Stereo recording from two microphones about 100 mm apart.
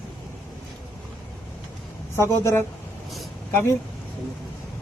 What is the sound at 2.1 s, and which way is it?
Speech, 30° left (ahead or behind).